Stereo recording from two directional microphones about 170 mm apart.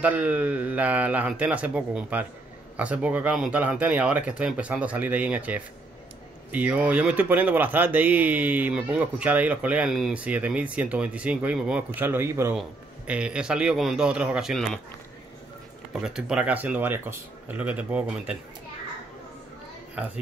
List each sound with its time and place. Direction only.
0.0 s a man's voice: 10° right (ahead or behind)
15.9 s speech: centre (ahead or behind)